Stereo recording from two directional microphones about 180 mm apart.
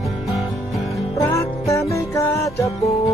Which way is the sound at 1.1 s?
15° left (ahead or behind).